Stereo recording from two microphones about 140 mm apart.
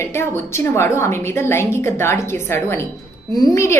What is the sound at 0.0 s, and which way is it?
A woman's voice, 20° left (ahead or behind).